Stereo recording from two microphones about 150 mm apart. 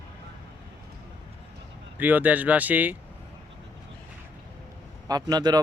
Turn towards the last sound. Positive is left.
turn(degrees=-25)  # may be behind; listen again after turning